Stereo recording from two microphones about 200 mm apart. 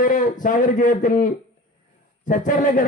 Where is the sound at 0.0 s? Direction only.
40° left (ahead or behind).